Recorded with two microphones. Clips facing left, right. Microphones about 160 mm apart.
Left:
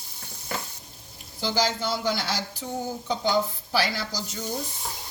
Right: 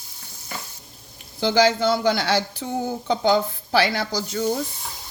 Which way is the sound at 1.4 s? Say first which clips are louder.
Right 8 dB; 65° right (ahead or behind).